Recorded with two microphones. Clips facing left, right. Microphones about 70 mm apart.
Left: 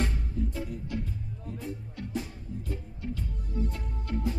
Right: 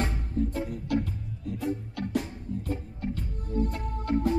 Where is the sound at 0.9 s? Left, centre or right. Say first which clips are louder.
Right 9 dB; right.